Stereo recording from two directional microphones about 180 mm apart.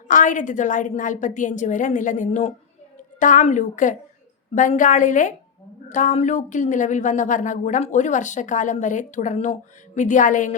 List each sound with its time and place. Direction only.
0.1 s speech: 45° left (ahead or behind)